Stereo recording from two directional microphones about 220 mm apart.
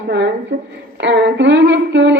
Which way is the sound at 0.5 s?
45° right (ahead or behind).